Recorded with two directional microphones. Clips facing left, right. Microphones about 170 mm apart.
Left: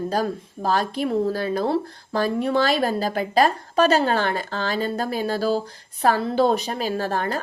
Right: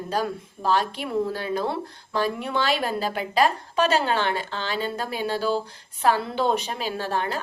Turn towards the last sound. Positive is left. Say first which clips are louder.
# left 3 dB
turn(degrees=45)  # may be behind; listen again after turning